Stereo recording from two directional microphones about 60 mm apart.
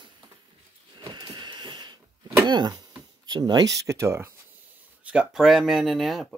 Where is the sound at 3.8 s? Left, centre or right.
Right.